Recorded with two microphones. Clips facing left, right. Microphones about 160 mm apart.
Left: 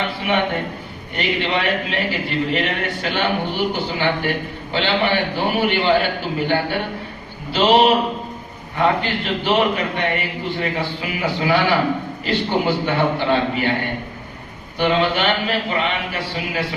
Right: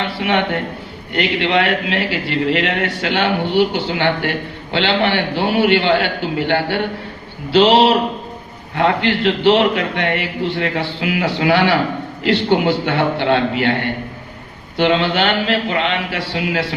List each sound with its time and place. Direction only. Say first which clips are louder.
0.2 s a man's voice: right 3 dB; 75° right (ahead or behind)
14.8 s a man's voice: right 3 dB; 80° right